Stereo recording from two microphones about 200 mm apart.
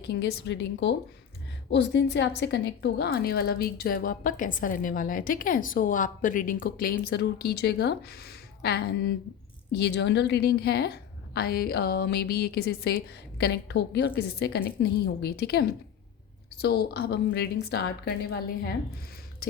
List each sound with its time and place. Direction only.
0.0 s a woman's voice: 55° left (ahead or behind)